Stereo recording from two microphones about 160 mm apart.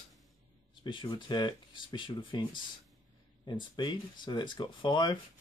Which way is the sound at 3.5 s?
30° left (ahead or behind).